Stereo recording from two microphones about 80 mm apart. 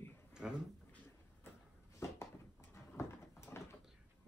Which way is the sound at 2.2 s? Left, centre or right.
Left.